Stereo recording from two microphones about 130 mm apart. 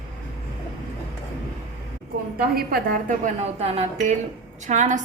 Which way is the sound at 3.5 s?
50° right (ahead or behind).